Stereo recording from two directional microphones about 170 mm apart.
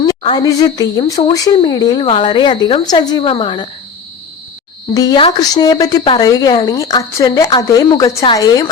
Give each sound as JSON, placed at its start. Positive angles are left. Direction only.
{"t": 0.0, "sound": "speech", "side_deg": 25}
{"t": 4.9, "sound": "speech", "side_deg": 25}